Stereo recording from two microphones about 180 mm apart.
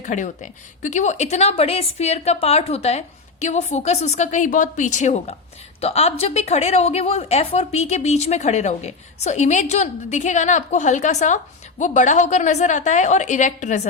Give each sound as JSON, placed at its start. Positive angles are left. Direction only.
{"t": 0.0, "sound": "a woman's voice", "side_deg": 45}